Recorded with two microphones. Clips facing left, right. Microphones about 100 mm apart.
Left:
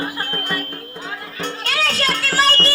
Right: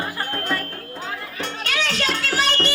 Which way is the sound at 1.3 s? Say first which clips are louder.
Left 3 dB; 35° left (ahead or behind).